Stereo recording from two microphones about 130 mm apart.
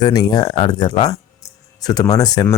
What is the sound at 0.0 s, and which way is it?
Speech, 30° left (ahead or behind).